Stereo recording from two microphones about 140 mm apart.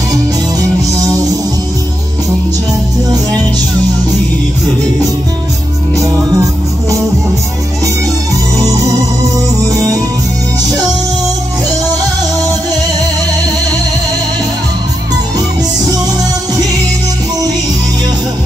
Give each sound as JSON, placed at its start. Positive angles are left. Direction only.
{"t": 0.1, "sound": "music", "side_deg": -25}
{"t": 5.9, "sound": "music", "side_deg": -25}